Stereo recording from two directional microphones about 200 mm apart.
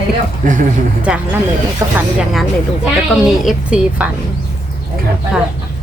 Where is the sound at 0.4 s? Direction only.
40° right (ahead or behind).